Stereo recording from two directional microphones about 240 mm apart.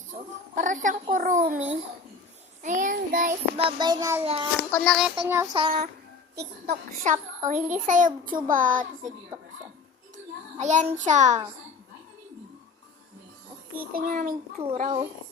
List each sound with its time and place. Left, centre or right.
0.1 s a child's voice: right
3.6 s a child's voice: centre
4.7 s a child's voice: centre
5.5 s a child's voice: right
10.6 s a child's voice: right
13.9 s a child's voice: right